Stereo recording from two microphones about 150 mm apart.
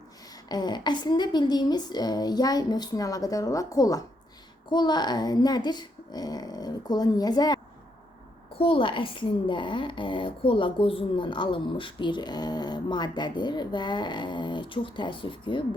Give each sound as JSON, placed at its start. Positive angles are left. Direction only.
{"t": 0.4, "sound": "speech", "side_deg": 25}
{"t": 8.5, "sound": "speech", "side_deg": 35}